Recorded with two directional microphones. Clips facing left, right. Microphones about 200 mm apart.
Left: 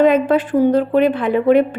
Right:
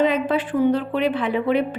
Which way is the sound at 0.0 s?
45° left (ahead or behind).